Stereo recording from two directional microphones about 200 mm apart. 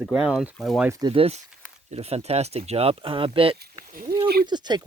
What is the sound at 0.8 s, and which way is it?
Speech, 20° right (ahead or behind).